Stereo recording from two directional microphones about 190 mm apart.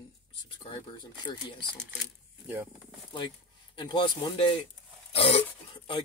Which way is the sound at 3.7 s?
25° left (ahead or behind).